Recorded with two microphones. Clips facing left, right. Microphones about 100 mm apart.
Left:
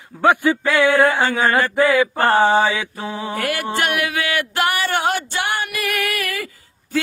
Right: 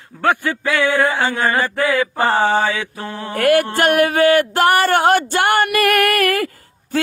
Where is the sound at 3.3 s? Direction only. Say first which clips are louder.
Right 10 dB; 50° right (ahead or behind).